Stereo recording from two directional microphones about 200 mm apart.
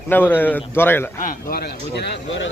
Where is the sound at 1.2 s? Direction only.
45° left (ahead or behind).